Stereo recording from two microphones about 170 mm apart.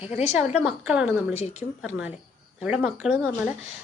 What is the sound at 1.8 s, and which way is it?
A woman's voice, 5° right (ahead or behind).